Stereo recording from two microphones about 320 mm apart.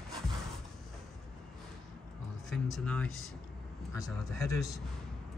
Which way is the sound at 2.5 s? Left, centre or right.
Centre.